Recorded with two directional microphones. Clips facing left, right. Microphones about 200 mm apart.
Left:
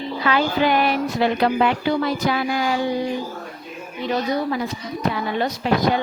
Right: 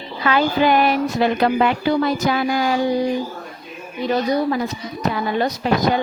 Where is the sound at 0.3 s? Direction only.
45° right (ahead or behind).